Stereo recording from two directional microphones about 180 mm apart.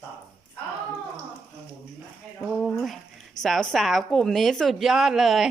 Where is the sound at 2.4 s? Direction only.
Centre (ahead or behind).